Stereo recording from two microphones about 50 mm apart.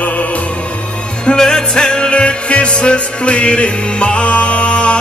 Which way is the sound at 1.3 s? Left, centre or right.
Centre.